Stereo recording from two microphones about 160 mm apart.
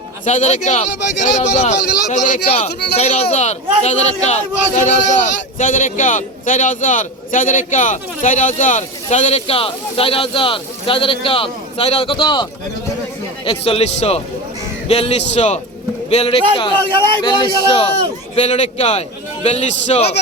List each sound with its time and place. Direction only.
0.3 s a man's voice: 45° left (ahead or behind); by 17.8 s 30° left (ahead or behind)
18.3 s a man's voice: 40° left (ahead or behind)